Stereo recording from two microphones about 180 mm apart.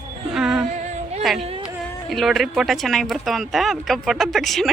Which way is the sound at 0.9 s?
35° right (ahead or behind).